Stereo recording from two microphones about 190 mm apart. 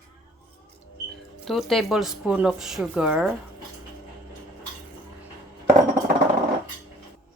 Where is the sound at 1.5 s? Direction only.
Centre (ahead or behind).